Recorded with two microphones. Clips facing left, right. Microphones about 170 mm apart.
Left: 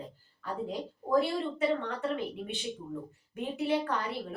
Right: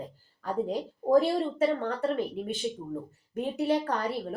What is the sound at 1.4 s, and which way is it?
Speech, 40° right (ahead or behind).